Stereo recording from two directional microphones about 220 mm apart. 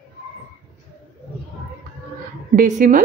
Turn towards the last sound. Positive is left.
turn(degrees=-35)  # may be behind; listen again after turning